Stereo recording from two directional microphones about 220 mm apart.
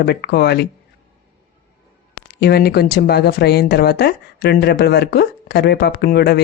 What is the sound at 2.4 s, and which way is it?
Speech, 45° left (ahead or behind).